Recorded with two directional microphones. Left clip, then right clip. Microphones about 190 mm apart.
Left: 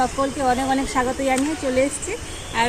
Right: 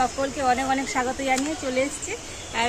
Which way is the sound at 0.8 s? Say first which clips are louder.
Left 3 dB; centre (ahead or behind).